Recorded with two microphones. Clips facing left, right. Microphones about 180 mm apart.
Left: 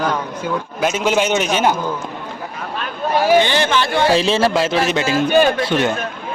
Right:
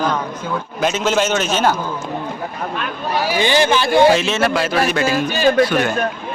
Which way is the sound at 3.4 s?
10° right (ahead or behind).